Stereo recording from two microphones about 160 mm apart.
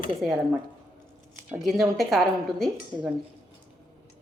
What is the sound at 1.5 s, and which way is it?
A woman's voice, centre (ahead or behind).